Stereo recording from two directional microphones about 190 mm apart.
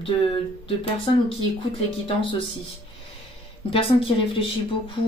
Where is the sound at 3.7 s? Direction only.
30° left (ahead or behind).